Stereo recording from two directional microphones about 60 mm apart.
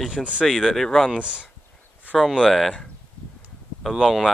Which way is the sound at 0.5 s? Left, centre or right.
Centre.